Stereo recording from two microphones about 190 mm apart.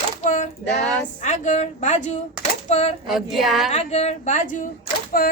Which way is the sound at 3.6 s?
35° left (ahead or behind).